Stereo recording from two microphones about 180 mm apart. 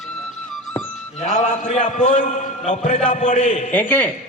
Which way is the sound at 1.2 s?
40° left (ahead or behind).